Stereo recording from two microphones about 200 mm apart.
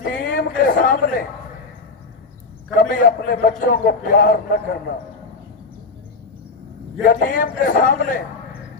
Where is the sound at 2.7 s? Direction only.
45° left (ahead or behind).